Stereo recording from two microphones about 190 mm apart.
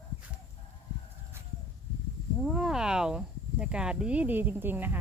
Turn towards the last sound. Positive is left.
turn(degrees=-10)  # may be behind; listen again after turning